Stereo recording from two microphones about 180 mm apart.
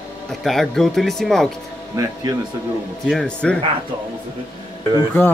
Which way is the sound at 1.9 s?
20° right (ahead or behind).